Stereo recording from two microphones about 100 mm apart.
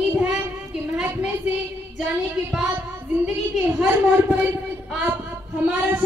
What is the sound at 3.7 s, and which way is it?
Speech, 20° right (ahead or behind).